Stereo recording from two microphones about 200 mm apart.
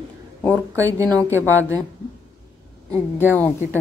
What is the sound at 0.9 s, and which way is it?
Speech, 15° right (ahead or behind).